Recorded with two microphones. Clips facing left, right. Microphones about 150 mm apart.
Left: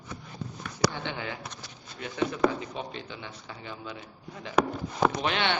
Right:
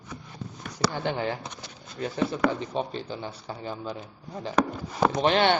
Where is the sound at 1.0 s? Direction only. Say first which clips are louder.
Right 7 dB; 35° right (ahead or behind).